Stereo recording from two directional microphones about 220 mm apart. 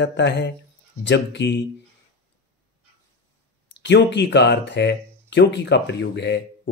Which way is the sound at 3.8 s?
55° left (ahead or behind).